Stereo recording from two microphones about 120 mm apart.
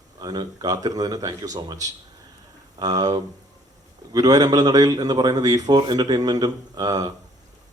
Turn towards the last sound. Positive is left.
turn(degrees=-35)  # may be behind; listen again after turning